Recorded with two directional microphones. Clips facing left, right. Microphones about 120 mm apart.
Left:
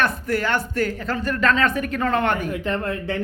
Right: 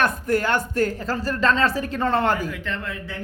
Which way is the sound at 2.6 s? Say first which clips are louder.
Left 6 dB; 40° left (ahead or behind).